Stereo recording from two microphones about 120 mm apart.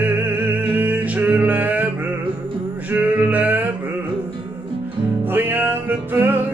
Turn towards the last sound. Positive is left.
turn(degrees=-15)  # may be behind; listen again after turning